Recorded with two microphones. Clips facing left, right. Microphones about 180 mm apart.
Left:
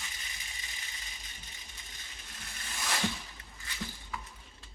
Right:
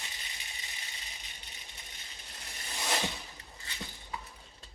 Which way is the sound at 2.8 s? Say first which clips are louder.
Right 3 dB; 20° right (ahead or behind).